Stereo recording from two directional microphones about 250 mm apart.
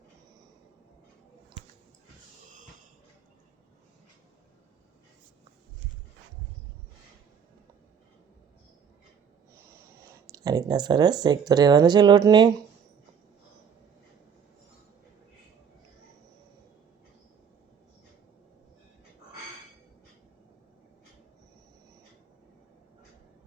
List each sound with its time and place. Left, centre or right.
10.3 s speech: centre